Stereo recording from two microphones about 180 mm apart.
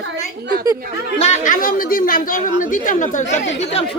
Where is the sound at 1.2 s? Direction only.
45° left (ahead or behind).